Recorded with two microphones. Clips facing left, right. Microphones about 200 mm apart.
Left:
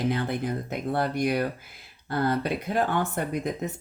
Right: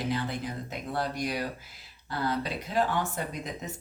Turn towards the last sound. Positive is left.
turn(degrees=60)  # may be behind; listen again after turning